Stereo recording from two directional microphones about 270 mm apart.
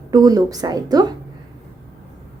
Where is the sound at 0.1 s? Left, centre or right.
Centre.